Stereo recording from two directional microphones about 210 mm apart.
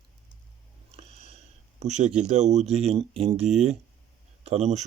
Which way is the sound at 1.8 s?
30° right (ahead or behind).